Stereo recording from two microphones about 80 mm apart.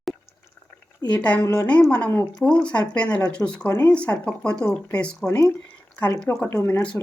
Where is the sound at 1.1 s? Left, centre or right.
Centre.